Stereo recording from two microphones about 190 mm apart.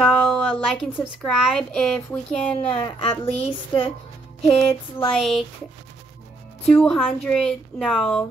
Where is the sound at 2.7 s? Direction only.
30° left (ahead or behind).